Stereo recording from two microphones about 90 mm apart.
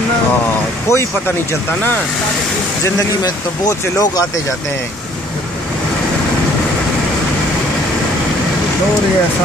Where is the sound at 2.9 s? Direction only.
45° left (ahead or behind).